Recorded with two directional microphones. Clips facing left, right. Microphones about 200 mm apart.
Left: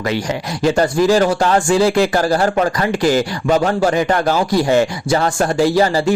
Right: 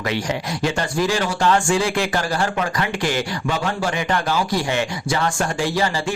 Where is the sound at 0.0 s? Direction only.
40° left (ahead or behind).